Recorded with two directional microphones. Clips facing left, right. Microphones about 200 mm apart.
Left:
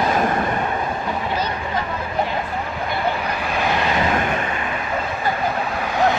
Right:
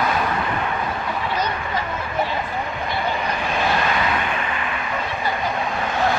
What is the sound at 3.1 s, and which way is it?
Vehicle, 5° left (ahead or behind).